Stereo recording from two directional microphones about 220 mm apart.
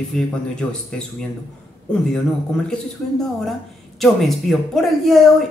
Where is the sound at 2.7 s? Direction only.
Centre (ahead or behind).